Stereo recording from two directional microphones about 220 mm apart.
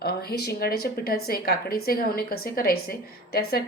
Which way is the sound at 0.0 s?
45° left (ahead or behind).